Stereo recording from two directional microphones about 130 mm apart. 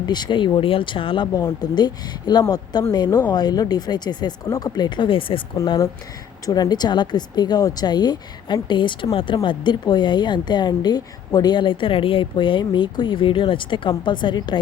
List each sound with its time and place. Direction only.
0.0 s speech: 35° left (ahead or behind)